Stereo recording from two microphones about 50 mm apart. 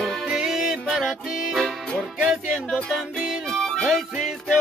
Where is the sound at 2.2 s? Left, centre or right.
Centre.